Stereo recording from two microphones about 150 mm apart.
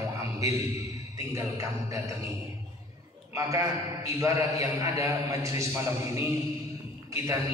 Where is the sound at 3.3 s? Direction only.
20° right (ahead or behind).